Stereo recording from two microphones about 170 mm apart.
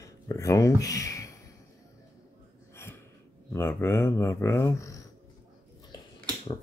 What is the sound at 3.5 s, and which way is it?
Speech, 15° left (ahead or behind).